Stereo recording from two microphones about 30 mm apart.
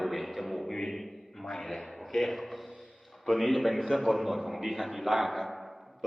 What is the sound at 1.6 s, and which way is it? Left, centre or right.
Speech, centre.